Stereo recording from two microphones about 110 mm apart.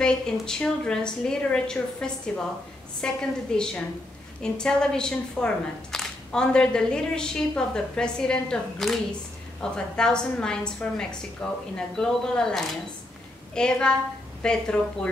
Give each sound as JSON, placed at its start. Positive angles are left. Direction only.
{"t": 0.0, "sound": "speech", "side_deg": 5}